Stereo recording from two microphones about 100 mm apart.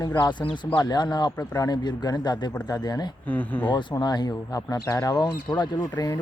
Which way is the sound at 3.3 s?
15° left (ahead or behind).